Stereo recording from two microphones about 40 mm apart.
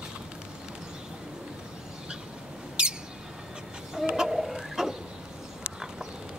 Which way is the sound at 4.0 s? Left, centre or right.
Centre.